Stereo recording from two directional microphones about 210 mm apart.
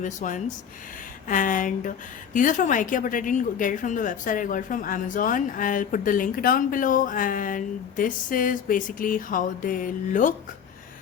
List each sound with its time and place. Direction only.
0.0 s a woman's voice: 35° left (ahead or behind)